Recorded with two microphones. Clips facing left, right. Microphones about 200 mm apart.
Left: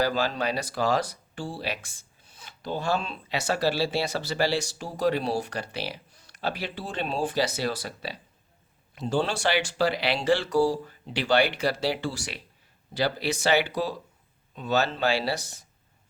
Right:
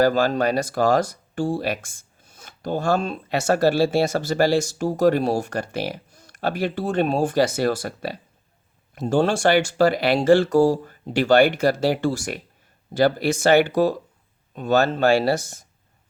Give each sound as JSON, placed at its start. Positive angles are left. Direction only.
{"t": 0.0, "sound": "speech", "side_deg": -50}